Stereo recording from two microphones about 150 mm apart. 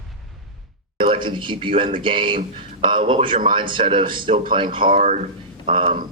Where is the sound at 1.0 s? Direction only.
35° right (ahead or behind).